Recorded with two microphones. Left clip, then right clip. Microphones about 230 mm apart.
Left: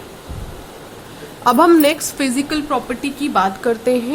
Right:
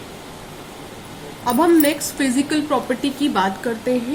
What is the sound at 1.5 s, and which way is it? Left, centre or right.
A woman's voice, left.